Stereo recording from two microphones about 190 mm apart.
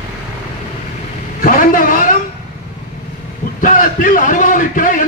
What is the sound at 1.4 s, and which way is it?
Speech, 45° left (ahead or behind).